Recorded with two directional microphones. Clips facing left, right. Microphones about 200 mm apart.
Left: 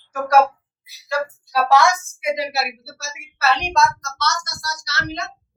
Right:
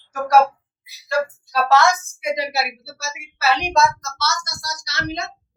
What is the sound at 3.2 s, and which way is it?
Speech, centre (ahead or behind).